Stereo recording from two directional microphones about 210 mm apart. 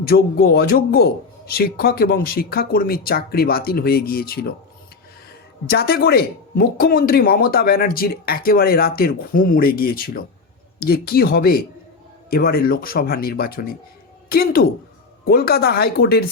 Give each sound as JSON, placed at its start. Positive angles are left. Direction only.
{"t": 0.1, "sound": "speech", "side_deg": 45}
{"t": 5.6, "sound": "speech", "side_deg": 50}